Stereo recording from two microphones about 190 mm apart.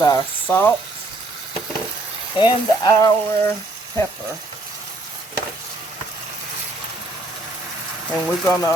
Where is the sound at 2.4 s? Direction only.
20° left (ahead or behind).